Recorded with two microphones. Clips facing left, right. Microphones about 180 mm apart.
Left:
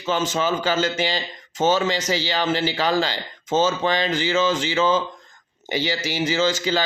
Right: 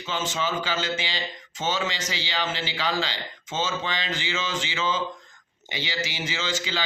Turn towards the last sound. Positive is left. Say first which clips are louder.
# left 9 dB
turn(degrees=45)  # may be behind; listen again after turning